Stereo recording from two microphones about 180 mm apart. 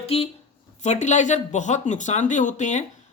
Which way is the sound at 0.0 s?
35° left (ahead or behind).